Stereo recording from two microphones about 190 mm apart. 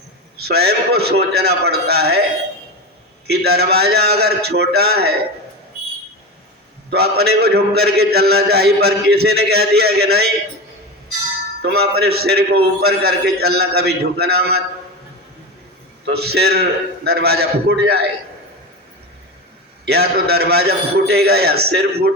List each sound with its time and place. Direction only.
0.4 s a man's voice: 55° right (ahead or behind)
3.2 s a man's voice: 55° right (ahead or behind)
6.9 s a man's voice: 55° right (ahead or behind)
11.6 s a man's voice: 55° right (ahead or behind)
16.0 s a man's voice: 55° right (ahead or behind)
19.8 s a man's voice: 60° right (ahead or behind)